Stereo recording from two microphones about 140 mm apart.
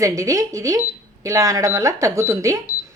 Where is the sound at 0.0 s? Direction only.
25° right (ahead or behind).